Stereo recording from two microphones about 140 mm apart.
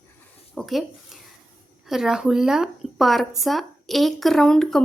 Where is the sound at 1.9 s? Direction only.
5° right (ahead or behind).